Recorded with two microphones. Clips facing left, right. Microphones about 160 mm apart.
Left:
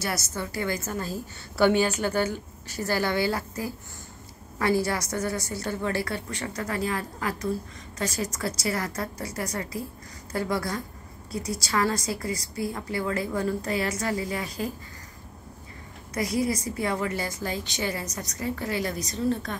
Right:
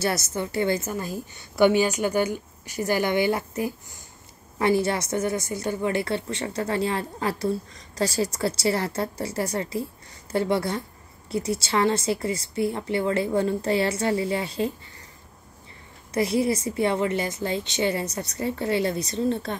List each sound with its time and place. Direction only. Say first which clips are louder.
0.0 s a woman's voice: right 5 dB; 25° right (ahead or behind)
16.1 s a woman's voice: right 4 dB; 25° right (ahead or behind)